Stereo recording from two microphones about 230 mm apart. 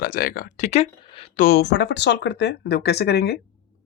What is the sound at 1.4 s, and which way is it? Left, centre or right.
Speech, left.